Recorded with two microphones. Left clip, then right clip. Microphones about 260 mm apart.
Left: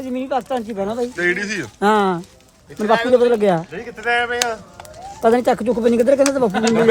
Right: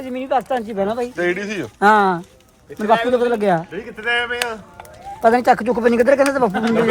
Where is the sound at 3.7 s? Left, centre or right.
Left.